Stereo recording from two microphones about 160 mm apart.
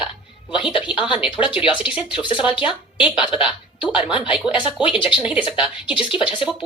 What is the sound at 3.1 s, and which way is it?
Speech, 30° left (ahead or behind).